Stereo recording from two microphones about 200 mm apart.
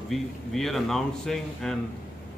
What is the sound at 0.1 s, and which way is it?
A man's voice, centre (ahead or behind).